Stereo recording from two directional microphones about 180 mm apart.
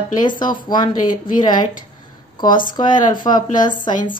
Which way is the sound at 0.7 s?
25° left (ahead or behind).